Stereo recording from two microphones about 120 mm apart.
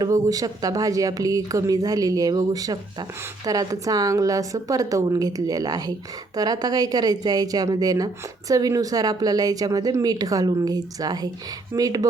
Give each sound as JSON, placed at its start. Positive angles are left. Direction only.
{"t": 0.0, "sound": "a woman's voice", "side_deg": -30}